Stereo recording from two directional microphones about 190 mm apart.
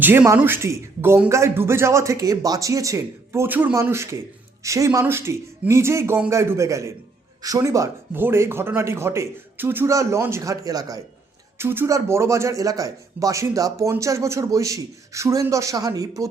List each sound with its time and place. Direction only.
0.0 s speech: 10° right (ahead or behind)